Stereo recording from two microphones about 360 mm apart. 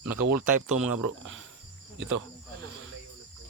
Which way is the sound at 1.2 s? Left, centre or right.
Right.